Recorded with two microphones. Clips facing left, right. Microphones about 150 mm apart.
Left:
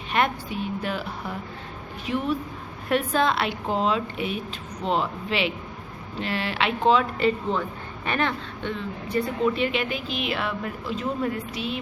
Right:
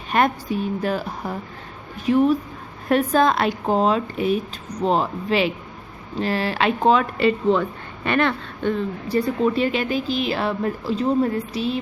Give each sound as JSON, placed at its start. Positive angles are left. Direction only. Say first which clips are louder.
{"t": 0.1, "sound": "a woman's voice", "louder": "right 5 dB", "side_deg": -40}
{"t": 7.2, "sound": "speech", "louder": "right 5 dB", "side_deg": -75}
{"t": 8.6, "sound": "a woman's voice", "louder": "right 9 dB", "side_deg": -35}